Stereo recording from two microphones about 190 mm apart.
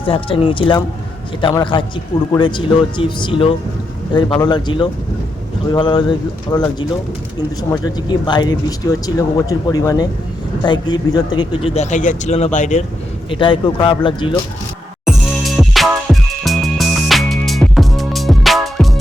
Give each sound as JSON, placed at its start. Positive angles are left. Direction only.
{"t": 0.0, "sound": "speech", "side_deg": 30}
{"t": 13.3, "sound": "speech", "side_deg": 25}
{"t": 15.0, "sound": "music", "side_deg": 0}